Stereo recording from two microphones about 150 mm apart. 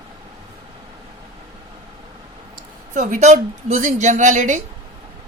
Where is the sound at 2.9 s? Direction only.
55° right (ahead or behind).